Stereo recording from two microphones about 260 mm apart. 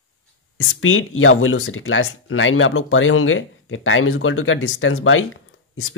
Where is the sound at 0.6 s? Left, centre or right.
Left.